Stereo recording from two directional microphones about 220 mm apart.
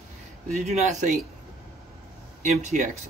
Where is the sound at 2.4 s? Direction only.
35° right (ahead or behind).